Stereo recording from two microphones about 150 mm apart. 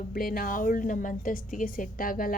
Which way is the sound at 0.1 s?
75° left (ahead or behind).